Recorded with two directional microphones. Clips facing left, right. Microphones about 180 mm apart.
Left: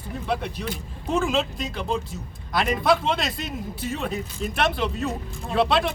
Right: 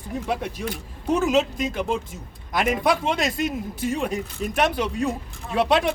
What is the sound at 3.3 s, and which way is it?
Speech, 50° right (ahead or behind).